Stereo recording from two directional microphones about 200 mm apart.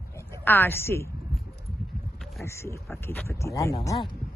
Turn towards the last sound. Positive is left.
turn(degrees=20)  # may be behind; listen again after turning